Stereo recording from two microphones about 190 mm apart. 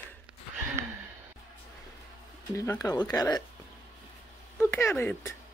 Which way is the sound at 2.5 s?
20° left (ahead or behind).